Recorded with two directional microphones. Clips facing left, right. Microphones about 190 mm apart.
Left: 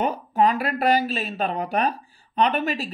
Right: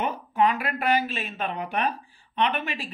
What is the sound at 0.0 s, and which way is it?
Speech, 40° left (ahead or behind).